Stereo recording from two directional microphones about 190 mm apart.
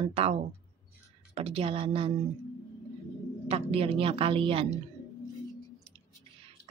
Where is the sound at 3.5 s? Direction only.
30° right (ahead or behind).